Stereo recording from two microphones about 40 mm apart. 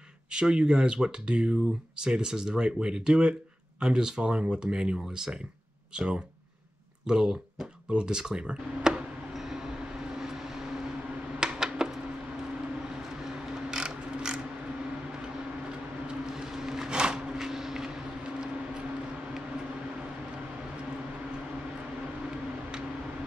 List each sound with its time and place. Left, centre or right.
0.3 s speech: right
7.1 s speech: centre
9.3 s train: centre
10.1 s vehicle: centre
11.3 s a sound: centre
13.7 s mechanisms: centre
16.1 s vehicle: centre
17.4 s vehicle: centre